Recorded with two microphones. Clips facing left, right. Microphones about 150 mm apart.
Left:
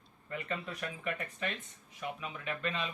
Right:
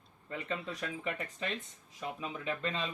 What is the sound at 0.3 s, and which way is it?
Speech, 25° right (ahead or behind).